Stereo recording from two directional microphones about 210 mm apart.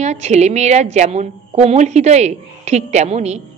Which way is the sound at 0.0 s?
30° right (ahead or behind).